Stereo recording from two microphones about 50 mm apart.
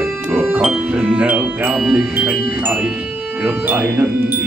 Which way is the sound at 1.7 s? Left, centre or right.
Centre.